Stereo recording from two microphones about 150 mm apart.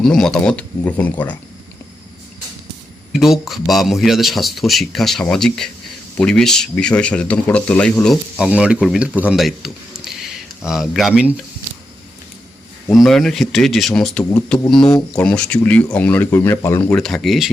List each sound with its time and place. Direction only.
0.0 s speech: 5° left (ahead or behind)
3.1 s speech: centre (ahead or behind)
12.9 s speech: centre (ahead or behind)
14.8 s speech: 25° left (ahead or behind)
15.1 s speech: 5° left (ahead or behind)
16.9 s speech: 5° left (ahead or behind)